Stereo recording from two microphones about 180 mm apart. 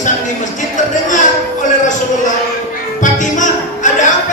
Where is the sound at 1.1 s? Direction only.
45° left (ahead or behind).